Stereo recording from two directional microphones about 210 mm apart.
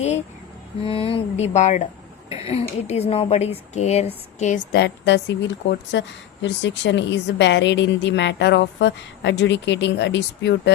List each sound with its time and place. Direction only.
0.9 s a woman's voice: 25° left (ahead or behind); by 10.5 s 55° left (ahead or behind)